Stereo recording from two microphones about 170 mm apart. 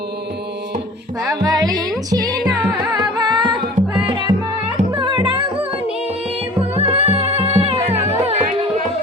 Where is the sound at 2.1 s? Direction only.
20° right (ahead or behind).